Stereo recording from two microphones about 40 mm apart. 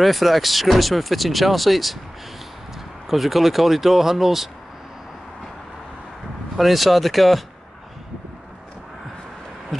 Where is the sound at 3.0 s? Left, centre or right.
Centre.